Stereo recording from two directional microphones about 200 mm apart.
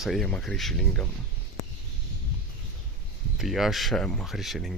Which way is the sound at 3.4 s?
Centre (ahead or behind).